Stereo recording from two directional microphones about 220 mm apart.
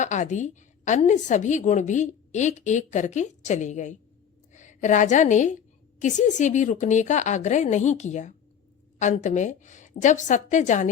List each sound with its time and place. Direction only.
0.0 s a woman's voice: 35° left (ahead or behind)